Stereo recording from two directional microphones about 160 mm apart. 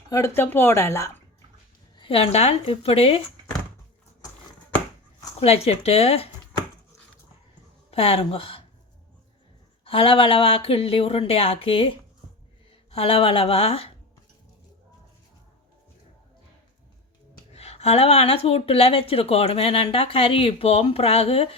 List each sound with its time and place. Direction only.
0.1 s speech: 15° left (ahead or behind)
2.0 s a woman's voice: 35° left (ahead or behind)
5.4 s a woman's voice: 40° left (ahead or behind)
7.9 s speech: 40° left (ahead or behind)
9.8 s a woman's voice: 35° left (ahead or behind)
17.5 s a woman's voice: 40° left (ahead or behind)